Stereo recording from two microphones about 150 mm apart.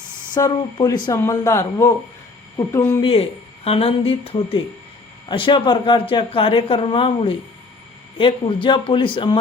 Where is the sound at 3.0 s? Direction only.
40° left (ahead or behind).